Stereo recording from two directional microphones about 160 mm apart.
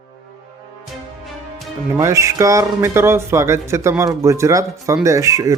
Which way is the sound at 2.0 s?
20° right (ahead or behind).